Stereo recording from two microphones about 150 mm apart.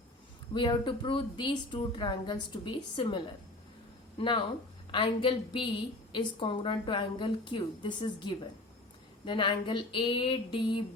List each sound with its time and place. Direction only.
0.5 s a woman's voice: 30° left (ahead or behind)